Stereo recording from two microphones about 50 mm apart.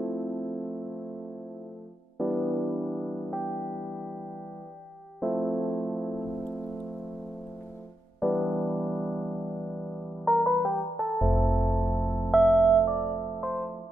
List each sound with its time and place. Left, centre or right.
0.0 s music: centre
2.1 s electric piano: centre
5.2 s music: centre
8.2 s electric piano: centre